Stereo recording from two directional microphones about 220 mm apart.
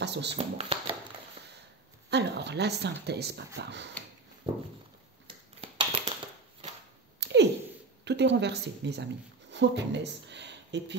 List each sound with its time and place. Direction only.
0.0 s speech: 50° right (ahead or behind)
0.4 s speech: 25° right (ahead or behind)
2.0 s a woman's voice: 50° right (ahead or behind)
4.4 s a sound: 20° right (ahead or behind)
7.2 s a sound: 50° right (ahead or behind)
8.0 s a woman's voice: 50° right (ahead or behind)